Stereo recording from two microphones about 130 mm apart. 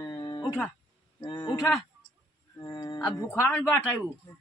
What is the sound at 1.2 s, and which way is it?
Mantra, 40° left (ahead or behind).